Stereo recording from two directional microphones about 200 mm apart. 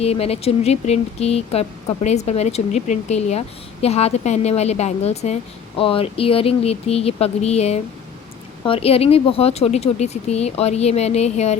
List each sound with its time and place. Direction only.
0.0 s speech: 30° left (ahead or behind)